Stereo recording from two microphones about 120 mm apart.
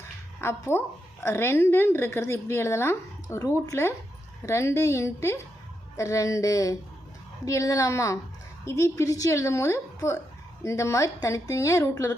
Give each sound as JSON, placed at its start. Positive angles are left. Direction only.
{"t": 0.4, "sound": "a woman's voice", "side_deg": 20}